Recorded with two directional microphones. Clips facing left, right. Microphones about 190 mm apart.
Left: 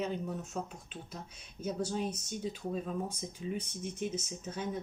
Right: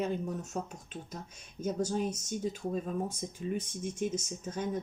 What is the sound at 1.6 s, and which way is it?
Speech, 45° right (ahead or behind).